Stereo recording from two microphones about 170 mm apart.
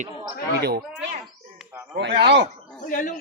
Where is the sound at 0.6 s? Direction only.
70° right (ahead or behind).